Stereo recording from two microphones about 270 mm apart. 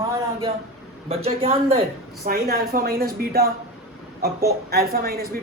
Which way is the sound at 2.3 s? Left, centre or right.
Right.